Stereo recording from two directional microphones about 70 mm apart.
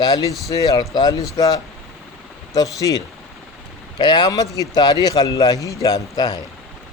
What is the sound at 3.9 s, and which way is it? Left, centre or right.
Speech, left.